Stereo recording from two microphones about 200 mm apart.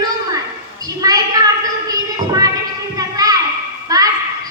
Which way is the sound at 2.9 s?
20° right (ahead or behind).